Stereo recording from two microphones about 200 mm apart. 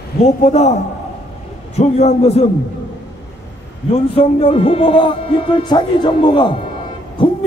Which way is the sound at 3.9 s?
30° left (ahead or behind).